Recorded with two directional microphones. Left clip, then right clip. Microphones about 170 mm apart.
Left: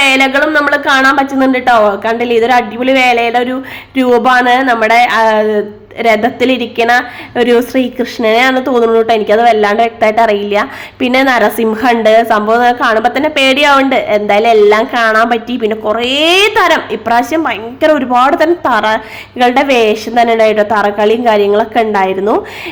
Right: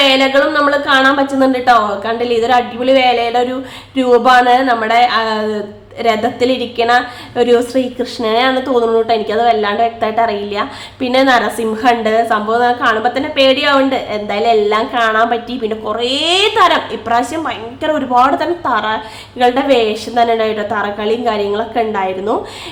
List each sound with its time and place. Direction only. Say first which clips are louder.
0.0 s a woman's voice: left 2 dB; 20° left (ahead or behind)